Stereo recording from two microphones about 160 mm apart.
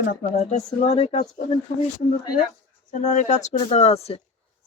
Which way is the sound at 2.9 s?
50° left (ahead or behind).